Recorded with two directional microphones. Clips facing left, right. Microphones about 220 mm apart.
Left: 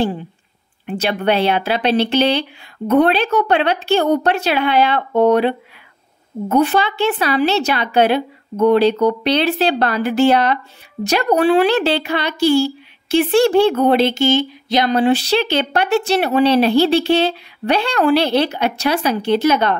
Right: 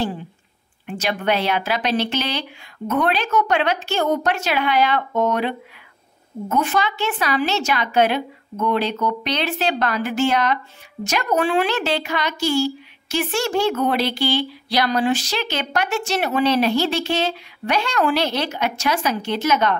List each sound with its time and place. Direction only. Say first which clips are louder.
1.0 s speech: left 5 dB; 30° left (ahead or behind)
6.5 s speech: left 6 dB; 35° left (ahead or behind)